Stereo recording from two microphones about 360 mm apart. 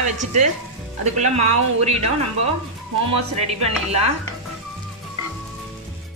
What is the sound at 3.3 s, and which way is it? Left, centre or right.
Speech, centre.